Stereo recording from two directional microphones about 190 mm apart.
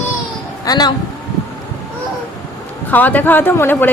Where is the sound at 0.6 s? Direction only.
20° left (ahead or behind).